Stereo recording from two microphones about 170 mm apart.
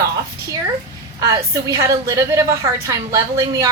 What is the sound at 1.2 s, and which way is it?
A woman's voice, 20° right (ahead or behind).